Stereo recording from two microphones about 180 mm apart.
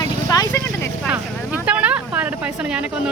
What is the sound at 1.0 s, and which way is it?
Vehicle, 10° right (ahead or behind).